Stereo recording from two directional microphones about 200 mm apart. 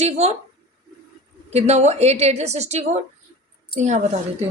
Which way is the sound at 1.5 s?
35° right (ahead or behind).